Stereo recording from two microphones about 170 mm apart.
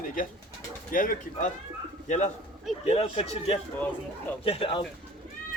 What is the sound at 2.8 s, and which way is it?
Speech, 35° left (ahead or behind).